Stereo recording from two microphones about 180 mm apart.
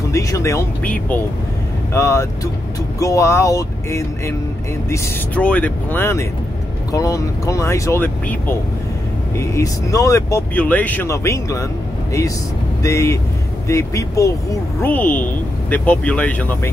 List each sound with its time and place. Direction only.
0.1 s speech: 15° left (ahead or behind)
9.4 s speech: 15° left (ahead or behind)
12.8 s speech: 15° left (ahead or behind)